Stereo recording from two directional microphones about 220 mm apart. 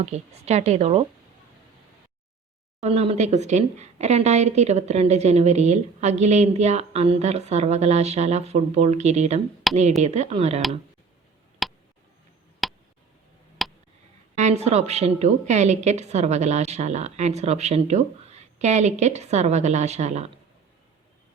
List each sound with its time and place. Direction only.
0.0 s speech: 30° right (ahead or behind)
2.8 s speech: 30° right (ahead or behind)
9.7 s speech: centre (ahead or behind)
10.0 s speech: 30° right (ahead or behind)
11.6 s tick: centre (ahead or behind)
13.6 s a sound: centre (ahead or behind)
14.3 s speech: 30° right (ahead or behind)